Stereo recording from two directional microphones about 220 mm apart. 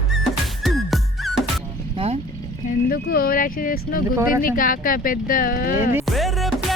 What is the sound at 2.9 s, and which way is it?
Speech, 45° left (ahead or behind).